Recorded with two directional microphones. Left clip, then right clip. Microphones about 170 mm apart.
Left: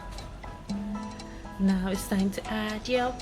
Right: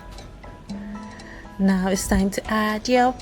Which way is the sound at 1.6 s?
45° right (ahead or behind).